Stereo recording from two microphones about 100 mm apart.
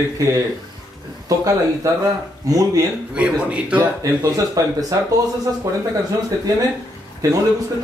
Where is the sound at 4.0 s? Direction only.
35° right (ahead or behind).